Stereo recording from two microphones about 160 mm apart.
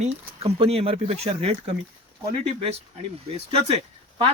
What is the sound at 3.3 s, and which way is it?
Speech, 40° right (ahead or behind).